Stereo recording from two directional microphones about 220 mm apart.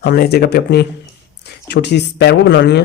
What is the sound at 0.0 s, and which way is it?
Speech, 45° left (ahead or behind).